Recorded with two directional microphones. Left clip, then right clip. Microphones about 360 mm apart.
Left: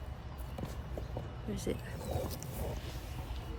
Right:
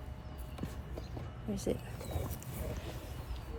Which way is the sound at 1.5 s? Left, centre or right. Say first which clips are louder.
Right 2 dB; centre.